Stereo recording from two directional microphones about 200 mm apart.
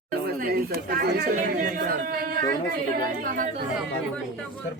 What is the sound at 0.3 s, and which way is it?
Speech, 45° right (ahead or behind).